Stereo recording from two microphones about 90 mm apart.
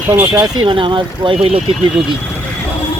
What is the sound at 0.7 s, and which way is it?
Speech, 70° right (ahead or behind).